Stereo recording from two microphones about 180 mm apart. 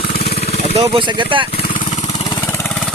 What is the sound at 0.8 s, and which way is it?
Speech, 30° right (ahead or behind).